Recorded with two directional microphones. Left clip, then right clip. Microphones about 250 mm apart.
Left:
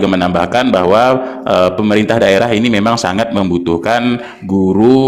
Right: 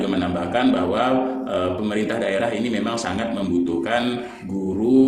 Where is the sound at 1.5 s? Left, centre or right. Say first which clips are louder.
Left 12 dB; left.